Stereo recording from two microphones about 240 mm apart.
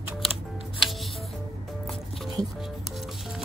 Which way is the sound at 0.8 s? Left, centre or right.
Centre.